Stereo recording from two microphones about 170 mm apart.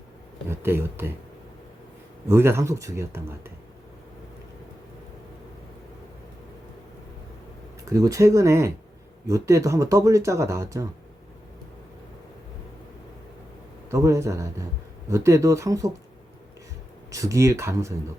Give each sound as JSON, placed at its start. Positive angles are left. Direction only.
{"t": 0.4, "sound": "speech", "side_deg": -15}
{"t": 2.3, "sound": "speech", "side_deg": -15}
{"t": 7.9, "sound": "speech", "side_deg": -20}
{"t": 13.9, "sound": "speech", "side_deg": -15}
{"t": 17.1, "sound": "speech", "side_deg": -20}